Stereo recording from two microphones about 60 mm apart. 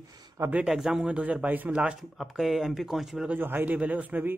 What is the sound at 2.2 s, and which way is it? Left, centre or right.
Speech, centre.